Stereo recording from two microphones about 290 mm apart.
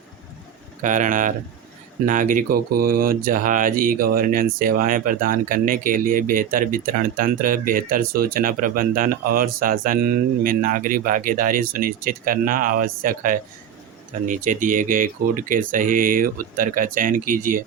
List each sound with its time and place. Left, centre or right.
0.8 s speech: right